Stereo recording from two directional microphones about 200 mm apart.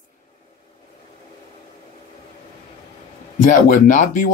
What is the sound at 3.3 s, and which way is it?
Speech, 40° left (ahead or behind).